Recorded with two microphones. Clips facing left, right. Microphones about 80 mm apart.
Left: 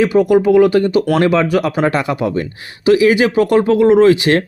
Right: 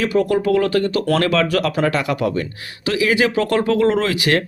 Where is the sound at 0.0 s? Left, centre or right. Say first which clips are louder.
Left 6 dB; left.